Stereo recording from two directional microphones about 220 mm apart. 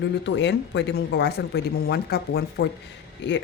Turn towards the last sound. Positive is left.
turn(degrees=55)  # may be behind; listen again after turning